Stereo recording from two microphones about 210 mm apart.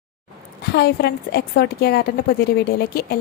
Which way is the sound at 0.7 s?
50° left (ahead or behind).